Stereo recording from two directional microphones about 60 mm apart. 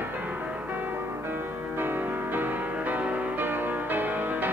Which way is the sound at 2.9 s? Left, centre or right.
Right.